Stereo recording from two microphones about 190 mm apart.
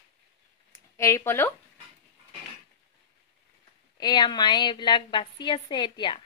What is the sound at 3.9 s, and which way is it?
A woman's voice, 20° left (ahead or behind).